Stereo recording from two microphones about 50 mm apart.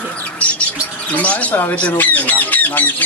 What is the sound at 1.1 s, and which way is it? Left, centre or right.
Speech, left.